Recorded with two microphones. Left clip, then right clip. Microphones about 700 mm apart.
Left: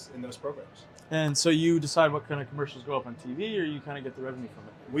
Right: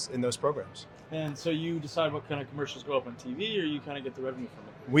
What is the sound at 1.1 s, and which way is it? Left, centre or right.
Speech, left.